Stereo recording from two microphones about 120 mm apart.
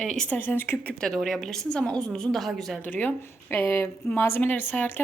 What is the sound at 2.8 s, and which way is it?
A woman's voice, 15° left (ahead or behind).